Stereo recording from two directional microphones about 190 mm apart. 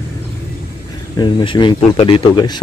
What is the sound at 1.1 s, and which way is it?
A man's voice, 25° left (ahead or behind).